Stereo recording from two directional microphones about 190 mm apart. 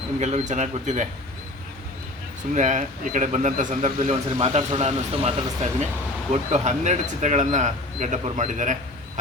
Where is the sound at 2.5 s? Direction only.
40° right (ahead or behind).